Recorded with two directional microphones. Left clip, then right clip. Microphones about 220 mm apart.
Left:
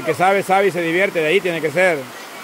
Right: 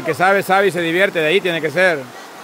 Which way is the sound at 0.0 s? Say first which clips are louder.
Right 1 dB; 10° right (ahead or behind).